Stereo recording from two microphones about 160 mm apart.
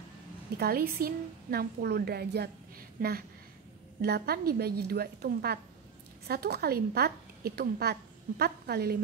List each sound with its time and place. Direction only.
0.6 s a woman's voice: 70° right (ahead or behind)
3.0 s a woman's voice: 75° right (ahead or behind)